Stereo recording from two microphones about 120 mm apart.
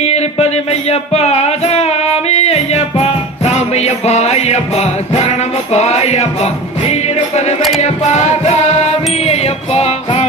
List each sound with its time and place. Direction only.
0.0 s music: 60° left (ahead or behind)